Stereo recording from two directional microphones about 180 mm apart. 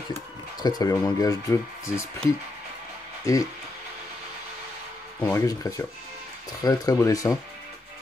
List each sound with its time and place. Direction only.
0.1 s speech: 20° left (ahead or behind)
3.3 s speech: 15° left (ahead or behind)
5.2 s speech: 20° left (ahead or behind)